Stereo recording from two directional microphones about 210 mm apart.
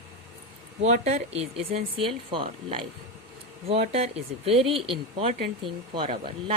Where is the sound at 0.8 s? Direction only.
35° right (ahead or behind).